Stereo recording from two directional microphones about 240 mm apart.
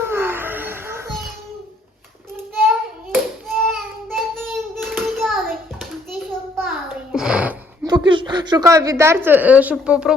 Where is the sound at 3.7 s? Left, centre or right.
Centre.